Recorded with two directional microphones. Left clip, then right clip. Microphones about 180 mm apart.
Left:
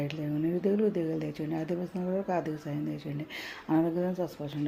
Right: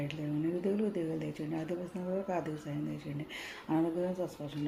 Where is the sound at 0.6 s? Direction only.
35° left (ahead or behind).